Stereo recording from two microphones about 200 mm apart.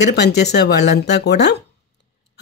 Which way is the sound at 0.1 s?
55° left (ahead or behind).